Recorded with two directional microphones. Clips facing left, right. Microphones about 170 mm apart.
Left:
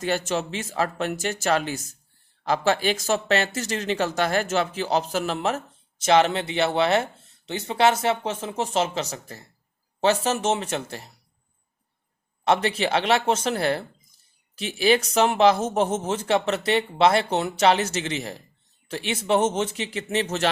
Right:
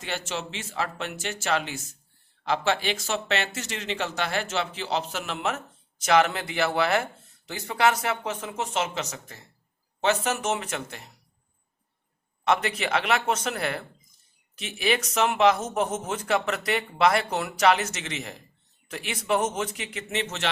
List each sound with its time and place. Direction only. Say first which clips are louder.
0.0 s speech: left 7 dB; 40° left (ahead or behind)
12.5 s speech: left 3 dB; 30° left (ahead or behind)